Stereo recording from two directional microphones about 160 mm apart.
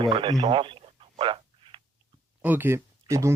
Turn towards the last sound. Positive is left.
turn(degrees=-20)  # may be behind; listen again after turning